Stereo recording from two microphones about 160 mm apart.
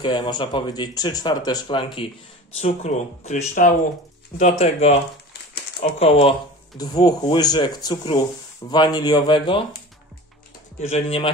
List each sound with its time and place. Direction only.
0.0 s speech: 30° left (ahead or behind)
2.5 s speech: 45° left (ahead or behind)
6.8 s speech: 25° left (ahead or behind)
10.8 s speech: 40° left (ahead or behind)